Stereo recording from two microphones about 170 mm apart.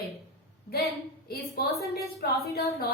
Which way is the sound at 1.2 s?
65° left (ahead or behind).